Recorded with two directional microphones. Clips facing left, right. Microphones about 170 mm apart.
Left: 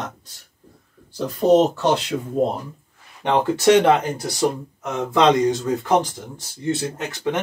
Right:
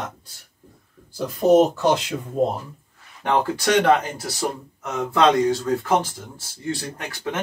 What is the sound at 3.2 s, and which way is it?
Speech, 25° left (ahead or behind).